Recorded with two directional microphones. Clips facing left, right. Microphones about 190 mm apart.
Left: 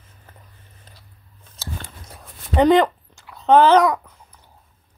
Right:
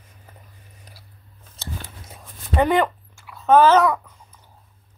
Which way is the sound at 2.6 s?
20° left (ahead or behind).